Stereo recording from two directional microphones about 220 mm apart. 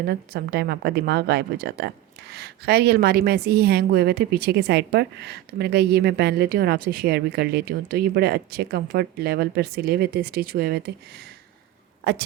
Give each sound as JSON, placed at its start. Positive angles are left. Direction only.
{"t": 0.0, "sound": "a woman's voice", "side_deg": -45}
{"t": 12.0, "sound": "a woman's voice", "side_deg": -50}